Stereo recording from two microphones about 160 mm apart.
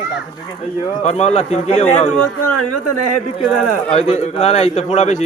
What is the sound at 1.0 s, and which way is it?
A man's voice, 40° left (ahead or behind).